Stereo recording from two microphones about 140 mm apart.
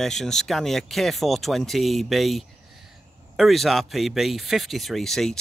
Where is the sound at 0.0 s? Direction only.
5° left (ahead or behind).